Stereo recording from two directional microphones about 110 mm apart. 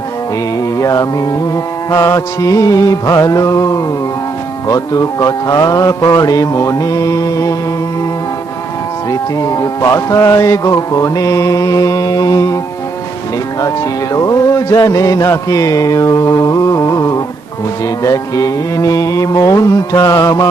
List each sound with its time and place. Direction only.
0.8 s speech: 30° left (ahead or behind)
9.0 s speech: 30° left (ahead or behind)
13.6 s speech: 35° left (ahead or behind)